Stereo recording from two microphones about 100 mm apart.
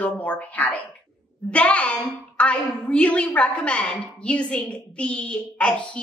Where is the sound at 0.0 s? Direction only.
15° left (ahead or behind).